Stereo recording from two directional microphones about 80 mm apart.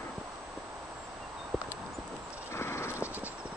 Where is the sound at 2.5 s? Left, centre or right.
Left.